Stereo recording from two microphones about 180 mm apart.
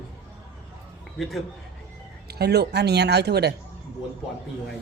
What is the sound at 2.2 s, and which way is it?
A woman's voice, 65° right (ahead or behind).